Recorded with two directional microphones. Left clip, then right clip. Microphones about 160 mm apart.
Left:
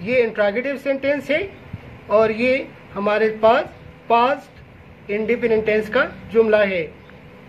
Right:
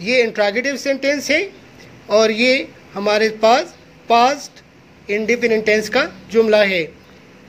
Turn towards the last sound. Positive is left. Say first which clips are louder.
# right 2 dB
turn(degrees=-55)  # may be behind; listen again after turning